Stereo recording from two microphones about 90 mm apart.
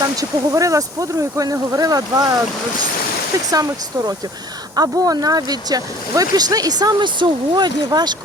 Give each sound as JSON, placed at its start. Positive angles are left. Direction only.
{"t": 0.2, "sound": "speech", "side_deg": -40}
{"t": 3.5, "sound": "speech", "side_deg": -40}